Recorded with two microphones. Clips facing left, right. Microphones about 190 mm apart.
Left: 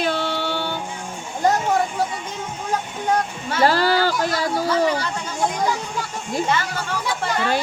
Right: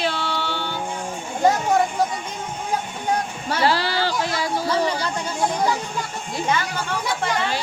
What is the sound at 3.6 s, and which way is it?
Speech, 45° left (ahead or behind).